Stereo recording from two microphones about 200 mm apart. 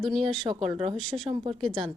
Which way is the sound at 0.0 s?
Centre (ahead or behind).